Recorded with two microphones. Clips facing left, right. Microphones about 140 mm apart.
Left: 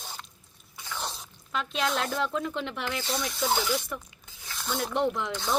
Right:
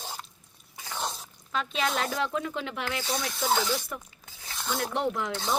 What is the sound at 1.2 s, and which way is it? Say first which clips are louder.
Speech: right 1 dB; centre (ahead or behind).